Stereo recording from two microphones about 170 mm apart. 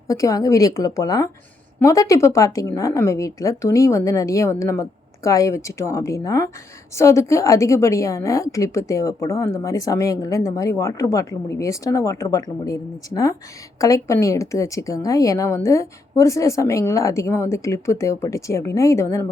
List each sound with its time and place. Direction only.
0.1 s a woman's voice: 20° left (ahead or behind)